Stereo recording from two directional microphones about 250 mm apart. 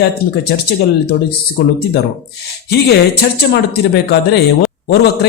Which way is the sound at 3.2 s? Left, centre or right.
Left.